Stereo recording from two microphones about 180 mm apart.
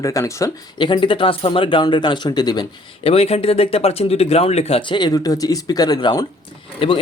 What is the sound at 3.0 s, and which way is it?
Speech, 35° left (ahead or behind).